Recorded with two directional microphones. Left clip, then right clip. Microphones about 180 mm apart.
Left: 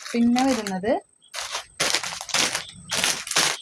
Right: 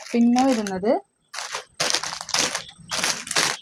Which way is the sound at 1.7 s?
20° right (ahead or behind).